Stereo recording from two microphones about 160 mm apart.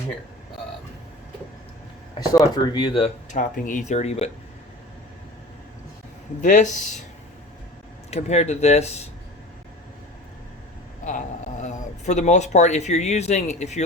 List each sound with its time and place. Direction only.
2.3 s speech: 25° left (ahead or behind)
3.3 s speech: 55° left (ahead or behind)
6.4 s speech: 50° left (ahead or behind)
8.1 s speech: 45° left (ahead or behind)
11.6 s speech: 45° left (ahead or behind)